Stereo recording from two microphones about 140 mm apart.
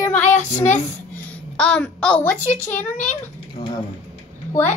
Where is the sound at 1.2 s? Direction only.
5° left (ahead or behind).